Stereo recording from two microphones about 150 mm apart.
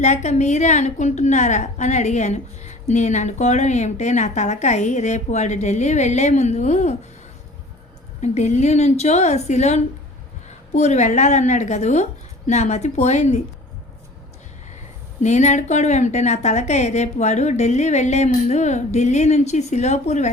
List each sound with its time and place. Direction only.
0.0 s a woman's voice: 50° left (ahead or behind)
8.2 s a woman's voice: 50° left (ahead or behind)
15.2 s a woman's voice: 50° left (ahead or behind)